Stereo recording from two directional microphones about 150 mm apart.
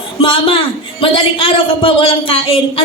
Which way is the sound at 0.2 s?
35° left (ahead or behind).